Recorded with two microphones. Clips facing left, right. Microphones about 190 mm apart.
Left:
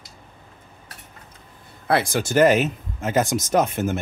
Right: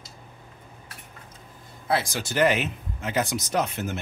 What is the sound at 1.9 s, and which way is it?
Speech, 60° left (ahead or behind).